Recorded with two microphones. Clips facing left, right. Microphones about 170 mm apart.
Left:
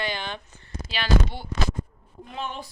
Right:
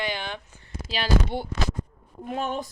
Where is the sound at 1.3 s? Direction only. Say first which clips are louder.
Right 1 dB; 55° right (ahead or behind).